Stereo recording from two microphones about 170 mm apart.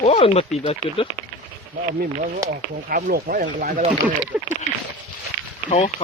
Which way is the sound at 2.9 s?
55° right (ahead or behind).